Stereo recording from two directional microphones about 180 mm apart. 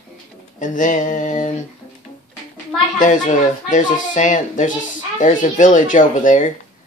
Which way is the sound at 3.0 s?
45° left (ahead or behind).